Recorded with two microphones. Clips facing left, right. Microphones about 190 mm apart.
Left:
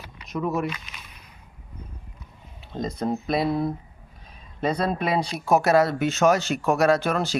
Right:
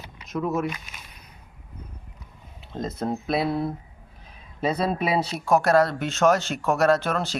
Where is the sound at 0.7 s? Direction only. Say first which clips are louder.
Even; 45° right (ahead or behind).